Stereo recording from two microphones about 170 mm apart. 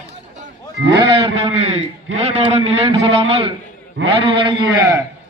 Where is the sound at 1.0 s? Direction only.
30° right (ahead or behind).